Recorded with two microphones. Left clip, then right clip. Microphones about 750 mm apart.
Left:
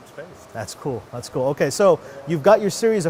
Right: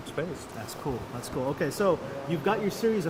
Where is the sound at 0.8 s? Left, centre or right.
Left.